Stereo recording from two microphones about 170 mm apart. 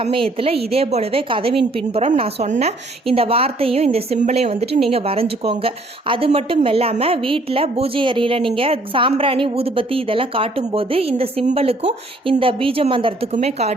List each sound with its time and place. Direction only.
0.0 s a woman's voice: 35° right (ahead or behind)